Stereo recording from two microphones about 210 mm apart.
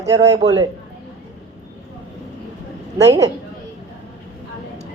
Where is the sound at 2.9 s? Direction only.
15° right (ahead or behind).